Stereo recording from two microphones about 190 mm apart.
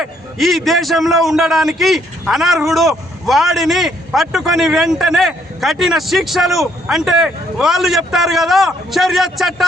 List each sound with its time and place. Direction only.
0.0 s a man's voice: centre (ahead or behind)